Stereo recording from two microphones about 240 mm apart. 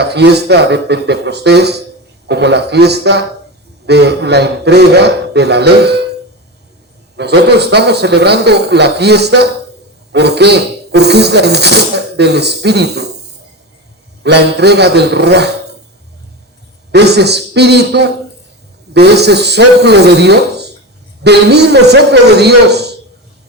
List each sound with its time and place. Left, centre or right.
0.0 s speech: right
7.2 s speech: right
14.3 s speech: right
16.9 s speech: right